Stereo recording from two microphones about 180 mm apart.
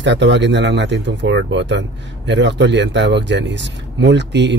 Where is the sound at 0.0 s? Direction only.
80° right.